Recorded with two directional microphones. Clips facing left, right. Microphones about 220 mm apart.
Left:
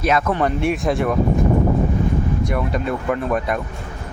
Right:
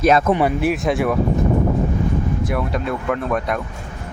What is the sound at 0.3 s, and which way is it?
Speech, 5° right (ahead or behind).